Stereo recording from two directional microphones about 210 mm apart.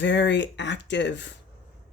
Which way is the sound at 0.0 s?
55° left (ahead or behind).